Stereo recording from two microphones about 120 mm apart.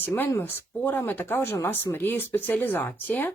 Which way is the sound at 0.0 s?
15° left (ahead or behind).